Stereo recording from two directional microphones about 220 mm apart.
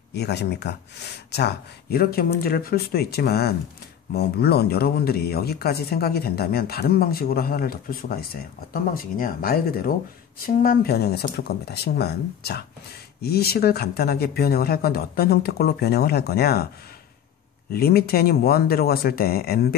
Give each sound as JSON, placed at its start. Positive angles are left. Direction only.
{"t": 0.1, "sound": "speech", "side_deg": 50}
{"t": 17.7, "sound": "speech", "side_deg": 45}